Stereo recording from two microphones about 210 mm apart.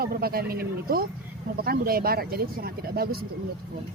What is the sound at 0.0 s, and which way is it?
Speech, 45° right (ahead or behind).